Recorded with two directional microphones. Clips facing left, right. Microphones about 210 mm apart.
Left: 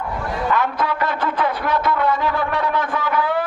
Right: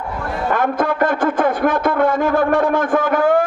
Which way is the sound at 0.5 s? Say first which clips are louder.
Right 5 dB; 50° right (ahead or behind).